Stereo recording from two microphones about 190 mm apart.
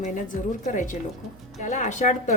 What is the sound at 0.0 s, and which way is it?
Speech, 40° left (ahead or behind).